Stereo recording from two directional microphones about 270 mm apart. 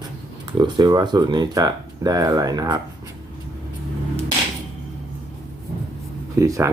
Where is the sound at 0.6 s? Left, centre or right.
Centre.